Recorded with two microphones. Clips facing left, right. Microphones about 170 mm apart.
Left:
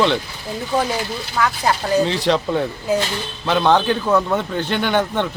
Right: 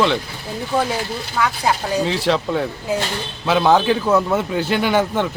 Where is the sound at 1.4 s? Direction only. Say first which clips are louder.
Even; 5° right (ahead or behind).